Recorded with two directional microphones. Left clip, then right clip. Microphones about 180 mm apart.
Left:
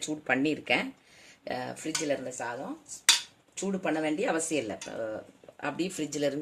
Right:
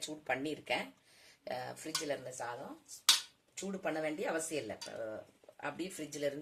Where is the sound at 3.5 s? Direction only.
50° left (ahead or behind).